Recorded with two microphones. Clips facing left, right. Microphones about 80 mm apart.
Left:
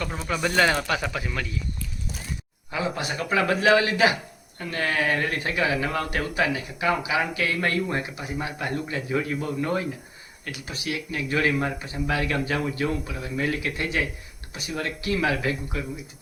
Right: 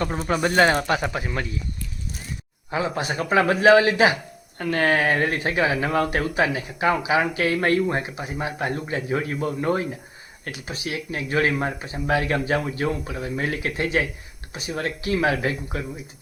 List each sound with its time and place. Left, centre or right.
0.0 s speech: right
2.6 s speech: right
4.5 s speech: right
10.5 s speech: right